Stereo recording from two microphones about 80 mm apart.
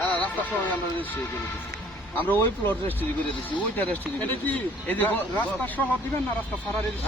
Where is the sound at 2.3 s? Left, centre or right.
Left.